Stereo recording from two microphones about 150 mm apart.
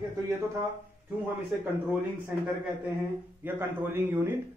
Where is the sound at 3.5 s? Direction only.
15° right (ahead or behind).